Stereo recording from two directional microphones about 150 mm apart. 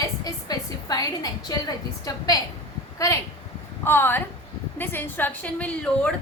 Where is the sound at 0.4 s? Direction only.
25° left (ahead or behind).